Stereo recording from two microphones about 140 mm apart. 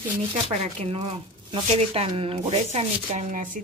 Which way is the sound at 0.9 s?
45° right (ahead or behind).